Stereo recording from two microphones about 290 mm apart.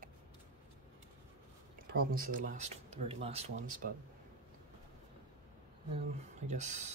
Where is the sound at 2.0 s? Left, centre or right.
Right.